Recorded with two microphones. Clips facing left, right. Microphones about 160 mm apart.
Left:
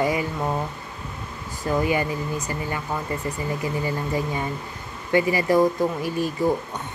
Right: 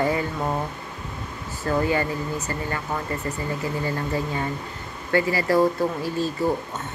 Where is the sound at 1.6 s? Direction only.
15° left (ahead or behind).